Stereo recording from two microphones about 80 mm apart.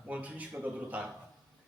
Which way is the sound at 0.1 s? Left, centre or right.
Centre.